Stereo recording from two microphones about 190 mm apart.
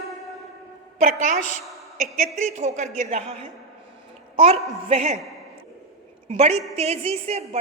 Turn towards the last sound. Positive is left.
turn(degrees=-35)  # may be behind; listen again after turning